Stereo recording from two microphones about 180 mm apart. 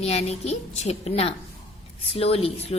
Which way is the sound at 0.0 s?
35° left (ahead or behind).